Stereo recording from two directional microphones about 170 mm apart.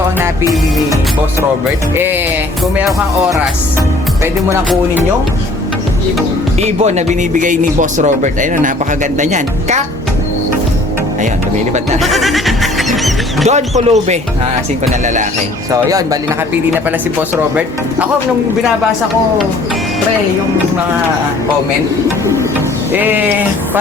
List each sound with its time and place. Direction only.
0.2 s music: 20° right (ahead or behind)
6.6 s speech: 40° right (ahead or behind)
11.9 s goat: centre (ahead or behind)
13.5 s speech: 40° right (ahead or behind)
15.0 s speech: 45° right (ahead or behind)
22.9 s sheep: 10° right (ahead or behind)